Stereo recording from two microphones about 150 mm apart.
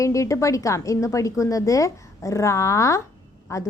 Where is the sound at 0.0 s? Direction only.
20° left (ahead or behind).